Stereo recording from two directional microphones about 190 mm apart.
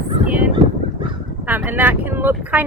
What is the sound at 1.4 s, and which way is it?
Speech, 10° right (ahead or behind).